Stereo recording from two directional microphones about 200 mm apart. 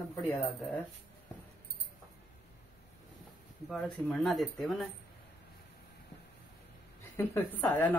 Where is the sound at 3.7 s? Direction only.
5° left (ahead or behind).